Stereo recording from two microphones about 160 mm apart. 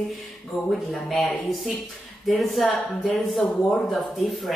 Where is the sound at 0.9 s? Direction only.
Centre (ahead or behind).